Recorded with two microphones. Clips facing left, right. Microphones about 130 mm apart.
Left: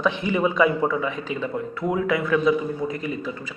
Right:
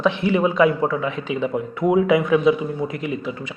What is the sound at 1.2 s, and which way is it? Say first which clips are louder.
A man's voice: right 4 dB; 15° right (ahead or behind).